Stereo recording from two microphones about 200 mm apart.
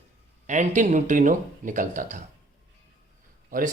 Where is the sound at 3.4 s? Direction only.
45° right (ahead or behind).